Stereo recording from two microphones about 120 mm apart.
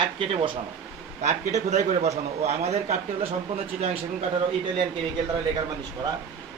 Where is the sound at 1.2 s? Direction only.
75° right (ahead or behind).